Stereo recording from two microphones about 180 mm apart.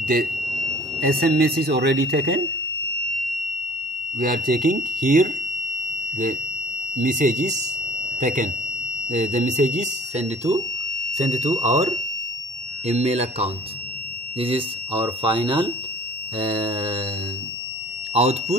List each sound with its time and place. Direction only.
0.0 s speech: 55° right (ahead or behind)
4.2 s speech: 50° right (ahead or behind)
7.0 s speech: 45° right (ahead or behind)
15.2 s mantra: 25° right (ahead or behind)
18.1 s speech: 35° right (ahead or behind)